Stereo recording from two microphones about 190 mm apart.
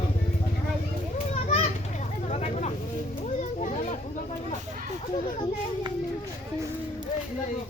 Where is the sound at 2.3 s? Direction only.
35° left (ahead or behind).